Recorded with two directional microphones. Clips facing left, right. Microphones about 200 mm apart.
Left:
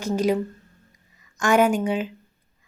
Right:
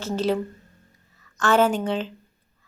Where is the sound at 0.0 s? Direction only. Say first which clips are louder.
Left 2 dB; 10° left (ahead or behind).